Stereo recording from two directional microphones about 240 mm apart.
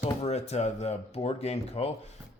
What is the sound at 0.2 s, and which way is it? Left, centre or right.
A man's voice, left.